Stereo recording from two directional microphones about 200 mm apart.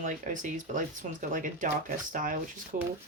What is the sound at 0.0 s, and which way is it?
Speech, 40° right (ahead or behind).